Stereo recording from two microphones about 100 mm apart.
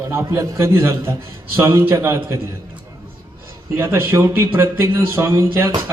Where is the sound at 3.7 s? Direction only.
25° right (ahead or behind).